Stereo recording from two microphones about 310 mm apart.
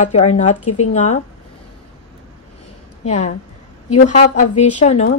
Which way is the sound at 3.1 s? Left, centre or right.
Left.